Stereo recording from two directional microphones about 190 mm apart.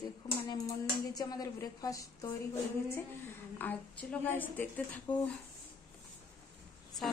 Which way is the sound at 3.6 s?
10° left (ahead or behind).